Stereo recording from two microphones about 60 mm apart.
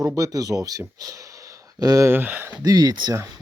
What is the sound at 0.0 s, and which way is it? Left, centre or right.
Speech, right.